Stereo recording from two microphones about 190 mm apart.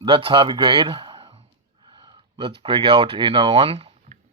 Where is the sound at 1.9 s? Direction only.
20° right (ahead or behind).